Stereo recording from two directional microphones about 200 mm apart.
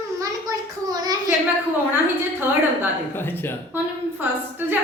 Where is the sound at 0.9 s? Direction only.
20° right (ahead or behind).